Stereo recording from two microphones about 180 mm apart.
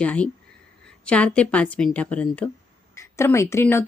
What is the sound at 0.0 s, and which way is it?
Speech, 5° left (ahead or behind).